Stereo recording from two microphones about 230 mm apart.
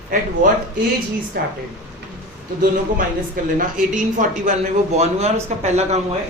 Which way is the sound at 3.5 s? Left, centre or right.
Right.